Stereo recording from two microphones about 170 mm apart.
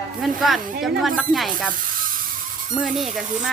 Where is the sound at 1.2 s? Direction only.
Centre (ahead or behind).